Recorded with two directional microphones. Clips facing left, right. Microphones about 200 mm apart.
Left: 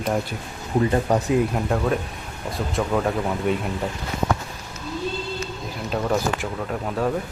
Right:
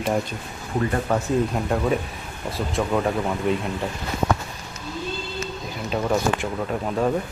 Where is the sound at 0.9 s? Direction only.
20° left (ahead or behind).